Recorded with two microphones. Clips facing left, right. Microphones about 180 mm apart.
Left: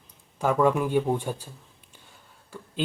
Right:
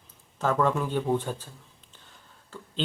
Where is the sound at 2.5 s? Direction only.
10° left (ahead or behind).